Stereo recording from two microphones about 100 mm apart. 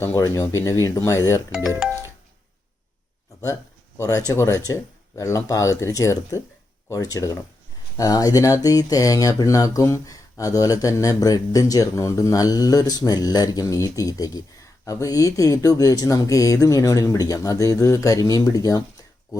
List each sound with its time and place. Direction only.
0.0 s speech: 30° left (ahead or behind)
3.4 s speech: 30° left (ahead or behind)